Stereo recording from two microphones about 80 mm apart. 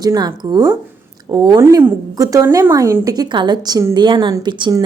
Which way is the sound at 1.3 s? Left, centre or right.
Right.